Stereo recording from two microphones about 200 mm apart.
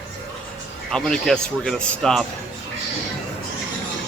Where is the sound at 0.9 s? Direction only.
5° left (ahead or behind).